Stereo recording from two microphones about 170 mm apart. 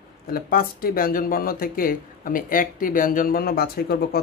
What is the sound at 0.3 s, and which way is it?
Speech, 60° left (ahead or behind).